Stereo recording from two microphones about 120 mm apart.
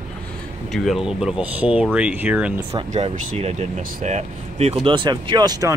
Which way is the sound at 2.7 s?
70° right (ahead or behind).